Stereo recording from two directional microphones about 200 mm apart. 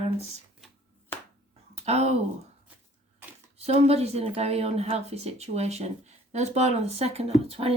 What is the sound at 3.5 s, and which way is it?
A woman's voice, 30° right (ahead or behind).